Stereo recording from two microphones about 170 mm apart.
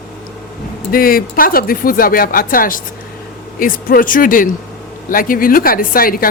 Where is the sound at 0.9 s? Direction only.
60° left (ahead or behind).